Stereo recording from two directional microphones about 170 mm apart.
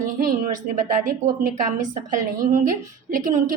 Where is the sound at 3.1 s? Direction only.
50° right (ahead or behind).